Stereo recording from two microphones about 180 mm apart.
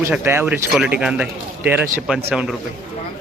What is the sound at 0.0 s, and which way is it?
A man's voice, 15° right (ahead or behind).